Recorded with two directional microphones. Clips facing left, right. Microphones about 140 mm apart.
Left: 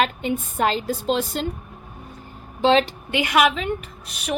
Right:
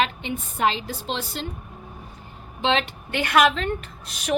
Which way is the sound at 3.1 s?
10° left (ahead or behind).